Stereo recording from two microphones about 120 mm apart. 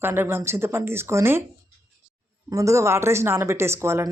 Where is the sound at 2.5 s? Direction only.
25° right (ahead or behind).